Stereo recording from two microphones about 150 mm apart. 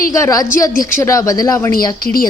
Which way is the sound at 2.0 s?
75° left (ahead or behind).